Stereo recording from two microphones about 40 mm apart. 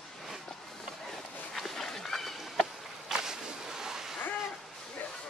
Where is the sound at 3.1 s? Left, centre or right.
Centre.